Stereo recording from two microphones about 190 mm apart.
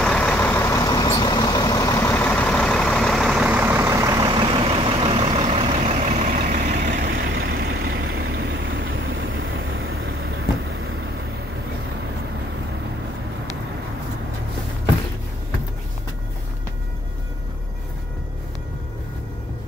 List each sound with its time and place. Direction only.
0.0 s vehicle: 5° left (ahead or behind); by 7.1 s 45° right (ahead or behind)
7.1 s vehicle: 60° right (ahead or behind); by 10.1 s 80° right